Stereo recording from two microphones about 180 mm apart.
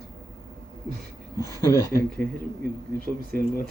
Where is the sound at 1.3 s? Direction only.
15° left (ahead or behind).